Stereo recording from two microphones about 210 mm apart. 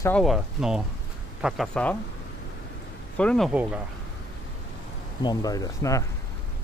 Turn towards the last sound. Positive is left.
turn(degrees=15)  # may be behind; listen again after turning